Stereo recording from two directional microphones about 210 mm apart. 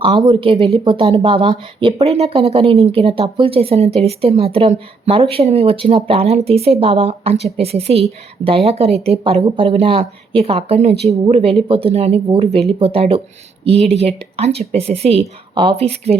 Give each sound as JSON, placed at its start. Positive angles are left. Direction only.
{"t": 0.3, "sound": "speech", "side_deg": -25}